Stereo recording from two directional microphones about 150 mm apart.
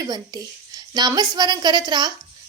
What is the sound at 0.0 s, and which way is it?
Speech, 25° right (ahead or behind).